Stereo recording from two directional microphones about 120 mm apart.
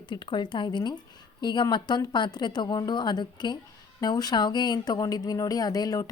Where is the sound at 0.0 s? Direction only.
40° left (ahead or behind).